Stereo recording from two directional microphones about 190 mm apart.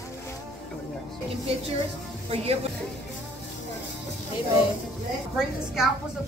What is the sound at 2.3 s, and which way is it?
Speech, 30° right (ahead or behind).